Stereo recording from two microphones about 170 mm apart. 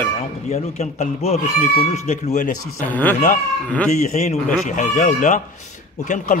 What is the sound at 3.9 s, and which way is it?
A man's voice, 40° left (ahead or behind).